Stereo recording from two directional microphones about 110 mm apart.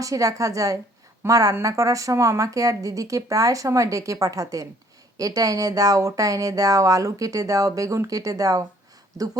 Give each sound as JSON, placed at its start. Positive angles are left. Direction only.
{"t": 0.0, "sound": "speech", "side_deg": -30}